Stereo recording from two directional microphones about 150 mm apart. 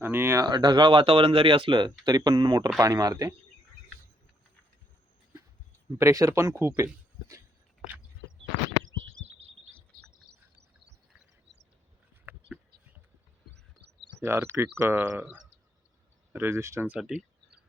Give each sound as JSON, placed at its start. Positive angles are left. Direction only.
{"t": 0.0, "sound": "speech", "side_deg": -15}
{"t": 6.0, "sound": "speech", "side_deg": -20}
{"t": 12.2, "sound": "a sound", "side_deg": -10}
{"t": 14.2, "sound": "speech", "side_deg": -15}